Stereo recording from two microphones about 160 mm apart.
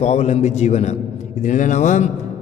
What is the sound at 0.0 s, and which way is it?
A man's voice, 45° left (ahead or behind).